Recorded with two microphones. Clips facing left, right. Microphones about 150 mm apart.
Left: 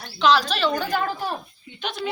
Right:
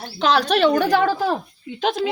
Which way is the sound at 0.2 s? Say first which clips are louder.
Right 3 dB; 55° right (ahead or behind).